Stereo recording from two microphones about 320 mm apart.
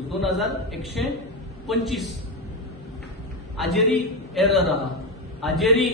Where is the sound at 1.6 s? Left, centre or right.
Centre.